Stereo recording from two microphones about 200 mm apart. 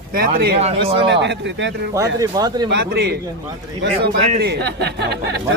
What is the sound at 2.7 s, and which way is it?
A man's voice, 60° right (ahead or behind).